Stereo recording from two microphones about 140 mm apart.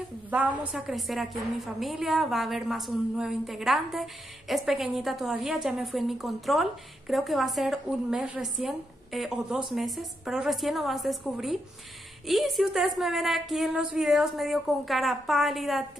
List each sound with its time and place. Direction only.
0.3 s a woman's voice: 10° right (ahead or behind)